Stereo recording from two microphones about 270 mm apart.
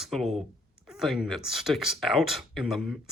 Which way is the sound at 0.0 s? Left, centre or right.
Centre.